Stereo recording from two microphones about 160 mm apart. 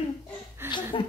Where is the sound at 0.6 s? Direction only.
15° right (ahead or behind).